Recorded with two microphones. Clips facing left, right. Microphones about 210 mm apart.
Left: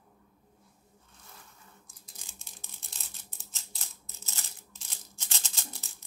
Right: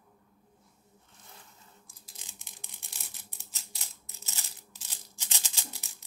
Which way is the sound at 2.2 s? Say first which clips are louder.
Even; 15° right (ahead or behind).